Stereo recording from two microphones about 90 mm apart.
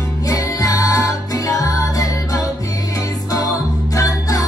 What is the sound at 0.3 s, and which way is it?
Music, 45° left (ahead or behind).